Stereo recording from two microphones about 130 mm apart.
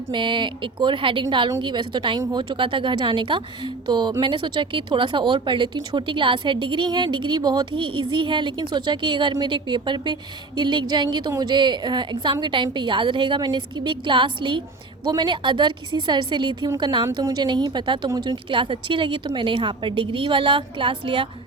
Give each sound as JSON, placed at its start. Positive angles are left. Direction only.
{"t": 0.1, "sound": "speech", "side_deg": -40}